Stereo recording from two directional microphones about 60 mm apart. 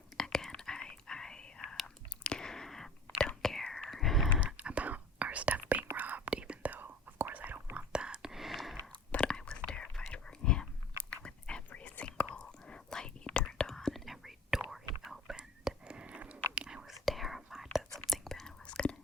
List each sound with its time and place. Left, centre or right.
0.2 s whispering: centre
4.4 s whispering: centre
7.9 s whispering: centre
8.9 s chewing: centre
9.6 s whispering: centre
17.9 s whispering: centre